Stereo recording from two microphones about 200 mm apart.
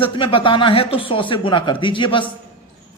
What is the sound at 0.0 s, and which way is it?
Speech, 25° left (ahead or behind).